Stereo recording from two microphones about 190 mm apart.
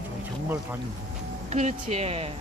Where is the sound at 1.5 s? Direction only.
35° right (ahead or behind).